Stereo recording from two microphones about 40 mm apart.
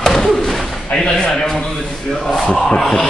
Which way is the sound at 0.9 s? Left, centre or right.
Left.